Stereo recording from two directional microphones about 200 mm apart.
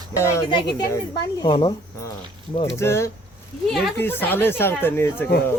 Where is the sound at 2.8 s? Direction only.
15° left (ahead or behind).